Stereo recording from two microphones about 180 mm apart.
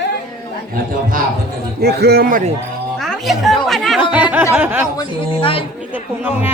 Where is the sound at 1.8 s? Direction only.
65° right (ahead or behind).